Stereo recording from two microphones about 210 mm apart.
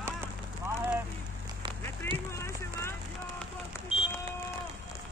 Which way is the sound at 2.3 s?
15° left (ahead or behind).